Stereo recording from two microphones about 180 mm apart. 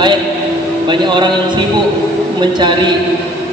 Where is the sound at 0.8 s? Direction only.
25° right (ahead or behind).